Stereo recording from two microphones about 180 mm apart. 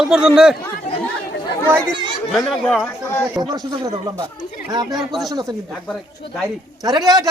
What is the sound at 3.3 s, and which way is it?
Speech, 20° right (ahead or behind).